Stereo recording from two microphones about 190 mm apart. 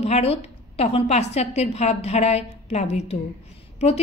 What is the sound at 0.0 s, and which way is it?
A woman's voice, 35° left (ahead or behind).